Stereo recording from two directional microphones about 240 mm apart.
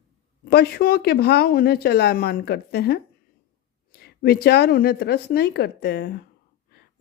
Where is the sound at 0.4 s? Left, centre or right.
Left.